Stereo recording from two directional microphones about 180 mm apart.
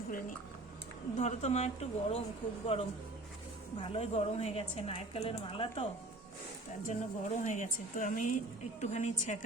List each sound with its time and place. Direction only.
1.1 s a woman's voice: 40° left (ahead or behind)
6.8 s a woman's voice: 45° left (ahead or behind)